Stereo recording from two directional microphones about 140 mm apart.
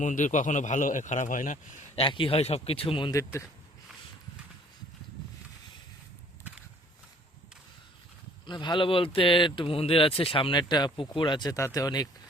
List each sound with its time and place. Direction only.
0.0 s speech: 65° left (ahead or behind)
2.0 s speech: 40° left (ahead or behind)
8.4 s speech: 35° left (ahead or behind)